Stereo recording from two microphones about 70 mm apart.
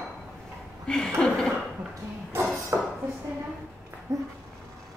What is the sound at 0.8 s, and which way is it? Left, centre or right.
Speech, centre.